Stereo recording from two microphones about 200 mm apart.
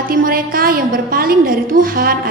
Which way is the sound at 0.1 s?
45° right (ahead or behind).